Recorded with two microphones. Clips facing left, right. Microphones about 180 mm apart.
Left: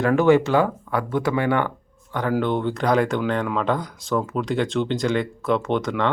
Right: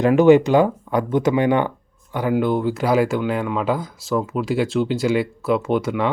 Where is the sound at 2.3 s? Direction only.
5° right (ahead or behind).